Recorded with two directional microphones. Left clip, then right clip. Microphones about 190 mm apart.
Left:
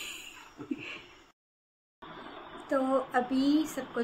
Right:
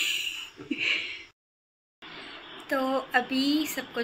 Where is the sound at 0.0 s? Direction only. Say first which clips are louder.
Right 14 dB; 5° right (ahead or behind).